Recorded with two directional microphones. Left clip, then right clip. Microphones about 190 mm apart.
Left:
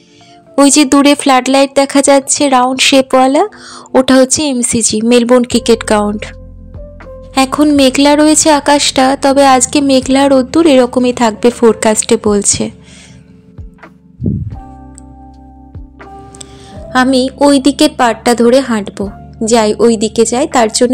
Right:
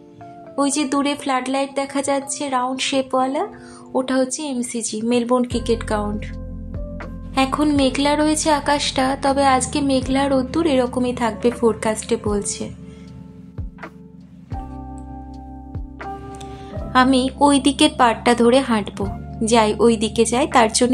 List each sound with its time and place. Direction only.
0.6 s speech: 45° left (ahead or behind)
7.3 s speech: 35° left (ahead or behind)
16.9 s a woman's voice: 25° left (ahead or behind)